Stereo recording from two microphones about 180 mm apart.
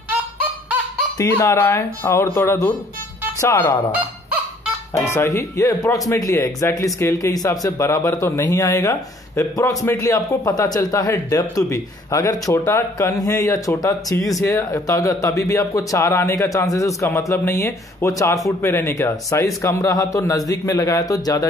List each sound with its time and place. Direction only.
1.1 s speech: 15° left (ahead or behind)
4.9 s speech: 15° left (ahead or behind)